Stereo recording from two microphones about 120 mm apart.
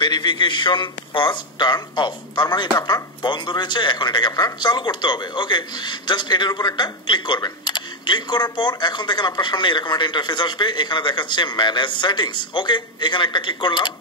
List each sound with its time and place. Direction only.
0.0 s a man's voice: 40° left (ahead or behind)